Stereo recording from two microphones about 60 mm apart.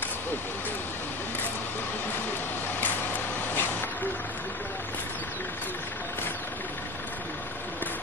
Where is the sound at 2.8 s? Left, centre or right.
Left.